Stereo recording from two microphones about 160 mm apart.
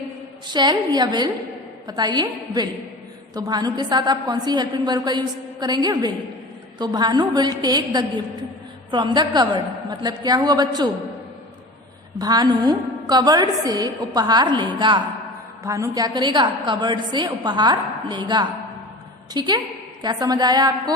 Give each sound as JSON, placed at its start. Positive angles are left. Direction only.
{"t": 0.4, "sound": "a woman's voice", "side_deg": -25}
{"t": 12.2, "sound": "a woman's voice", "side_deg": -25}